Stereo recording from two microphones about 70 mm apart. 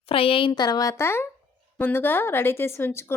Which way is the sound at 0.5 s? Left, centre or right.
Left.